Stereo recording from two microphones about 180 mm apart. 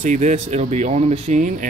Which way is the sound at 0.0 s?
40° right (ahead or behind).